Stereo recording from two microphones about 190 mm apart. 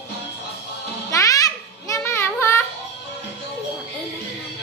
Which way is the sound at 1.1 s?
20° left (ahead or behind).